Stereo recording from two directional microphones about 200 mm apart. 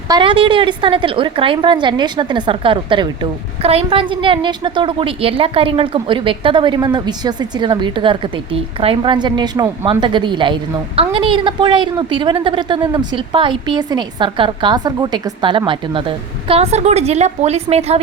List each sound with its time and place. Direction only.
0.1 s a woman's voice: 25° right (ahead or behind)